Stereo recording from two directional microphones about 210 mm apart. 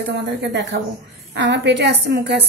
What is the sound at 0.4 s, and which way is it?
A woman's voice, 60° right (ahead or behind).